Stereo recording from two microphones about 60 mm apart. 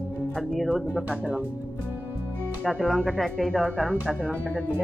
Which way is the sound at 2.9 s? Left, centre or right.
Right.